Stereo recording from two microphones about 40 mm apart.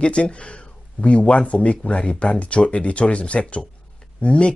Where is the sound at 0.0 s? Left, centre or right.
Left.